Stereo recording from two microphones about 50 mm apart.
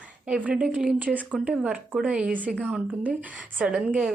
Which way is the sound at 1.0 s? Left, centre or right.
Right.